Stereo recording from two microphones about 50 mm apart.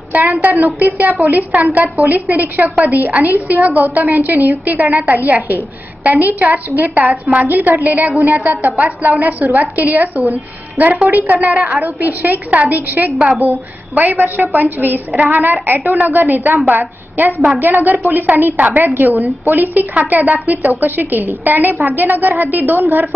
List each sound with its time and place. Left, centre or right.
0.2 s a woman's voice: right